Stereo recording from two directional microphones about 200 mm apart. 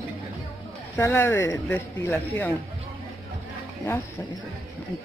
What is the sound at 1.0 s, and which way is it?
Speech, 15° left (ahead or behind).